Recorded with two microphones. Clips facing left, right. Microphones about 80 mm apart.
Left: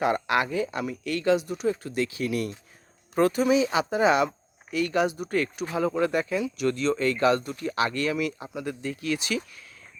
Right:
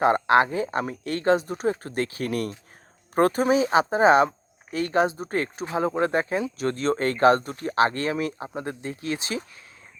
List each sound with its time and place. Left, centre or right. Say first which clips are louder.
0.0 s speech: right 5 dB; right